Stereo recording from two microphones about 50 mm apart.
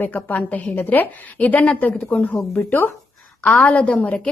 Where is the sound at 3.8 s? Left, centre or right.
Left.